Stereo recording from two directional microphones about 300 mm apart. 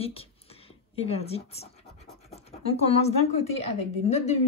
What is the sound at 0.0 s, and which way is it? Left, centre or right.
Speech, centre.